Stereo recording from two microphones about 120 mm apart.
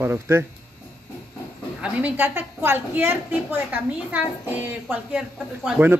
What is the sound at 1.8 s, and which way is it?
A woman's voice, 15° right (ahead or behind).